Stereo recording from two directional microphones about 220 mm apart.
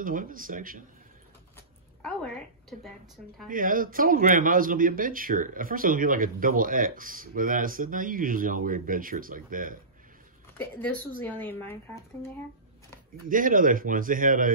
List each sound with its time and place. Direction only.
0.0 s speech: 40° right (ahead or behind)
2.0 s a woman's voice: 5° left (ahead or behind)
3.4 s speech: 40° right (ahead or behind)
10.6 s speech: 5° left (ahead or behind)
13.3 s speech: 40° right (ahead or behind)